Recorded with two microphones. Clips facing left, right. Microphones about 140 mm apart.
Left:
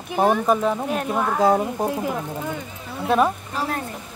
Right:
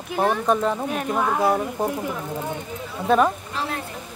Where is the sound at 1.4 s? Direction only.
20° left (ahead or behind).